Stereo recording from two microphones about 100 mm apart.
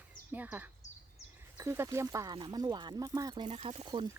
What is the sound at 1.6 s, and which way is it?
Speech, 30° right (ahead or behind).